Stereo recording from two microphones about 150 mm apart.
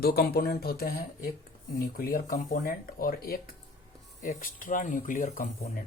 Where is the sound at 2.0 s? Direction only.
75° left (ahead or behind).